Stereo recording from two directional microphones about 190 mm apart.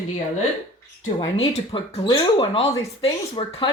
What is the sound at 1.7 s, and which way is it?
Speech, 25° left (ahead or behind).